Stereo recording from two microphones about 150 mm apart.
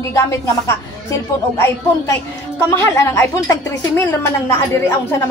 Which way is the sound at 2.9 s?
20° left (ahead or behind).